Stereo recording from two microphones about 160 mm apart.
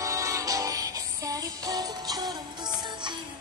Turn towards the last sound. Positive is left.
turn(degrees=-25)  # may be behind; listen again after turning